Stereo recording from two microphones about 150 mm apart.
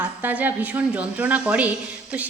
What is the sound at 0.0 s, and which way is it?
A woman's voice, 10° right (ahead or behind).